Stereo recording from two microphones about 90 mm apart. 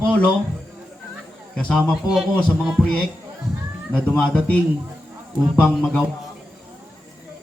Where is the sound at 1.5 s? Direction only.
10° left (ahead or behind).